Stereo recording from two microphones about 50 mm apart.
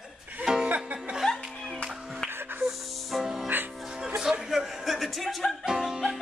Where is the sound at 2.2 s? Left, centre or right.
Right.